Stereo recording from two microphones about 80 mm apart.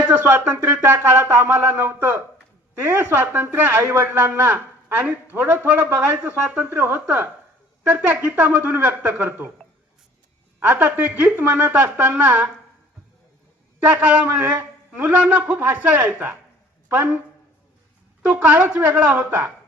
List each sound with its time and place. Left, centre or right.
0.0 s a man's voice: centre
10.6 s a man's voice: centre
13.8 s a woman's voice: centre
18.3 s a woman's voice: centre